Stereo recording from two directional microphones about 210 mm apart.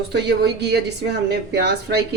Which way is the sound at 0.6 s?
50° right (ahead or behind).